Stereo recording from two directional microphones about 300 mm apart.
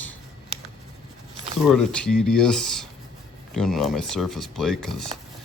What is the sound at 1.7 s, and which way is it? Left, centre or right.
Speech, centre.